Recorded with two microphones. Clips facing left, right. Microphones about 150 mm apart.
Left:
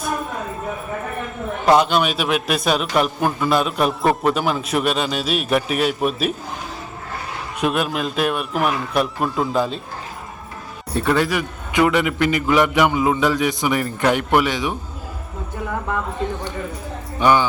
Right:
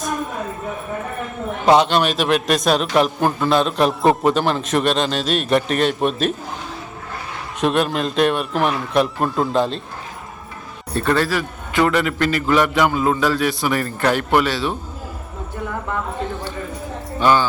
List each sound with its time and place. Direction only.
1.6 s a man's voice: centre (ahead or behind)
7.6 s a man's voice: 5° left (ahead or behind)
10.9 s a man's voice: 15° left (ahead or behind)
17.2 s speech: 15° left (ahead or behind)